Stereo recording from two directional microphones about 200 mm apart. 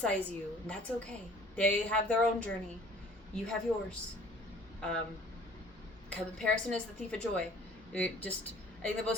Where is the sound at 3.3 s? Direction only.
5° left (ahead or behind).